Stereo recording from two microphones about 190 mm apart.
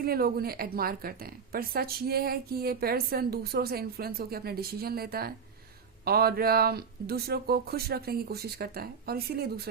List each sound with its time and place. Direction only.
0.0 s a woman's voice: 55° right (ahead or behind)